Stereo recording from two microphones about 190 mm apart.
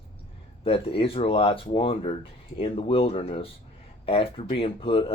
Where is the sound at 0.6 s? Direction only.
30° left (ahead or behind).